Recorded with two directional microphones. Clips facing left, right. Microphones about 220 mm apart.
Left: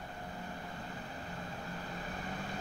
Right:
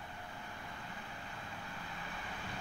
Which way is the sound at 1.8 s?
40° left (ahead or behind).